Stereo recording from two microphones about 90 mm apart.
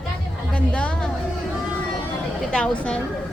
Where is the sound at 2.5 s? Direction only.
10° left (ahead or behind).